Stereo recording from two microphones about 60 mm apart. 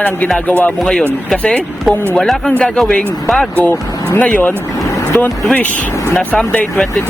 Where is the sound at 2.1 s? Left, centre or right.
Centre.